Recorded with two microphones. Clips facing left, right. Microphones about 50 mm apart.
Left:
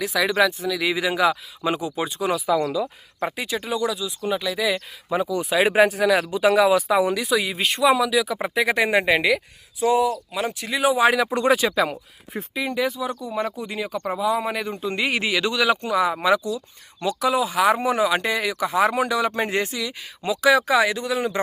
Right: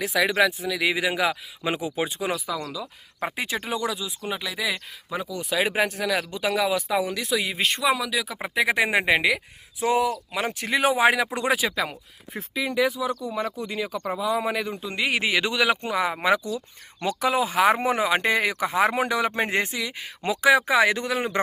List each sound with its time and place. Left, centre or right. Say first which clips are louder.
0.0 s speech: left 1 dB; right
0.3 s speech: left 2 dB; centre
2.5 s speech: left 9 dB; left
3.3 s speech: even; right; by 4.8 s centre
5.1 s speech: left 5 dB; centre
7.3 s speech: left 2 dB; centre
9.8 s speech: left 3 dB; right
10.9 s speech: left 3 dB; right
11.3 s speech: left 5 dB; centre
15.2 s speech: even; right
20.8 s speech: even; right